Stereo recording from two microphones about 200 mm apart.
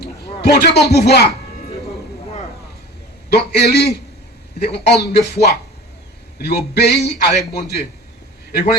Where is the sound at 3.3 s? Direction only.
55° left (ahead or behind).